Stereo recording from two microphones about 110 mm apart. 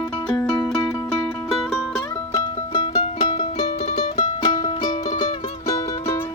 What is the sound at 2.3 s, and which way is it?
Music, 40° left (ahead or behind).